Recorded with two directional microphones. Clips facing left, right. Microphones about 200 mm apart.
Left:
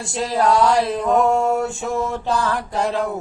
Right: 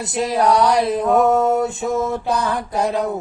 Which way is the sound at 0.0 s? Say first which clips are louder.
Right 2 dB; 20° right (ahead or behind).